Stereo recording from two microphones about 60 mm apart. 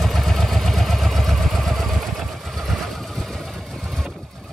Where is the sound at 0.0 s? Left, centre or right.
Centre.